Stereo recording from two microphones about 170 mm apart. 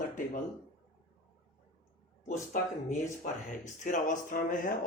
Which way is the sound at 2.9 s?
45° left (ahead or behind).